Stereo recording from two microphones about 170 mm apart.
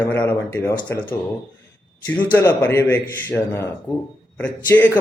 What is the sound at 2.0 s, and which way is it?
Speech, 10° left (ahead or behind).